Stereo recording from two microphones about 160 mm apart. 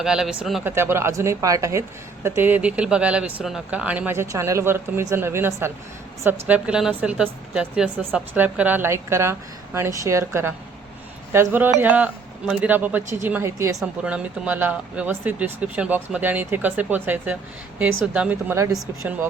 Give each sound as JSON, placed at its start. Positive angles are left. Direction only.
{"t": 0.0, "sound": "speech", "side_deg": -5}
{"t": 0.6, "sound": "speech", "side_deg": -15}
{"t": 6.5, "sound": "speech", "side_deg": -5}
{"t": 13.7, "sound": "speech", "side_deg": -5}